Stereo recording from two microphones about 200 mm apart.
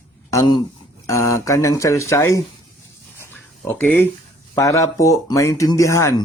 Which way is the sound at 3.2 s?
10° left (ahead or behind).